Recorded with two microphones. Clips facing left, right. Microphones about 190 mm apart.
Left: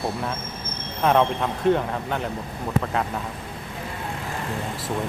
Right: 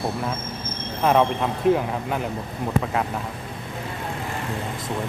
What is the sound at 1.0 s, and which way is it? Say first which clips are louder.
Speech: right 1 dB; 5° right (ahead or behind).